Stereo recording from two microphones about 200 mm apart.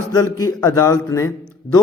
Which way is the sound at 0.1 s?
15° left (ahead or behind).